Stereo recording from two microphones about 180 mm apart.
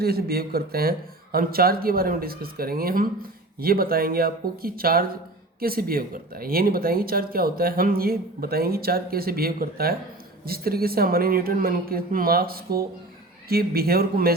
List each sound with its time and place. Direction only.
0.0 s speech: 60° right (ahead or behind)